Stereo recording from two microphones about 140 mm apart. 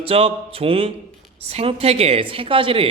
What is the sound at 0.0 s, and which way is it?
A man's voice, 45° right (ahead or behind).